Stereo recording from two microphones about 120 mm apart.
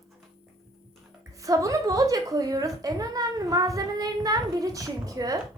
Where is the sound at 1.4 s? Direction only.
30° right (ahead or behind).